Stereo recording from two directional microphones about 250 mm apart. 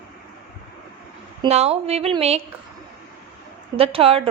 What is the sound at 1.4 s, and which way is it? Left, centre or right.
A woman's voice, right.